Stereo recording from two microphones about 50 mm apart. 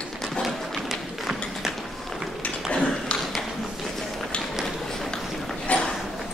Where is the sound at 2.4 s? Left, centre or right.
Left.